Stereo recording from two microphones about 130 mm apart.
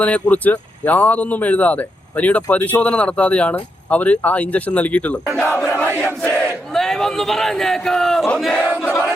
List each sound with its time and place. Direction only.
0.0 s speech: 10° left (ahead or behind)
5.4 s battle cry: 10° left (ahead or behind)
6.7 s speech: 5° left (ahead or behind)
8.8 s battle cry: 20° left (ahead or behind)